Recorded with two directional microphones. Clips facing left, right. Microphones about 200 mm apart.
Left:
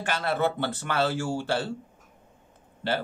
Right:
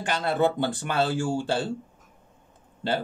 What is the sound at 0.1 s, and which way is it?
A man's voice, 15° right (ahead or behind).